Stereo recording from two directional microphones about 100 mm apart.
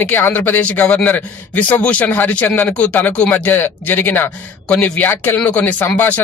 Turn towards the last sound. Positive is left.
turn(degrees=15)  # may be behind; listen again after turning